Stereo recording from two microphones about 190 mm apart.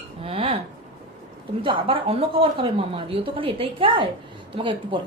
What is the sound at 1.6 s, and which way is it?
A woman's voice, 25° right (ahead or behind).